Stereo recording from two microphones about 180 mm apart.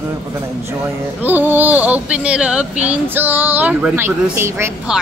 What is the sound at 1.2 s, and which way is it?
Speech, 10° right (ahead or behind).